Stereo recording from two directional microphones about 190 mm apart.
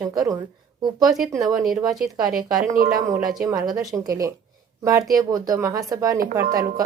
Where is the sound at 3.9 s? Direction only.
10° right (ahead or behind).